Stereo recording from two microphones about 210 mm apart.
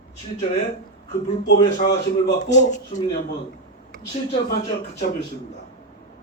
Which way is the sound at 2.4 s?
35° left (ahead or behind).